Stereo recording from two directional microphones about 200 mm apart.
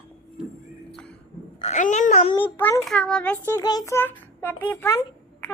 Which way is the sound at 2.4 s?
10° left (ahead or behind).